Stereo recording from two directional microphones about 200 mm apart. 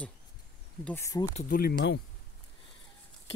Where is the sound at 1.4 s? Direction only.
45° left (ahead or behind).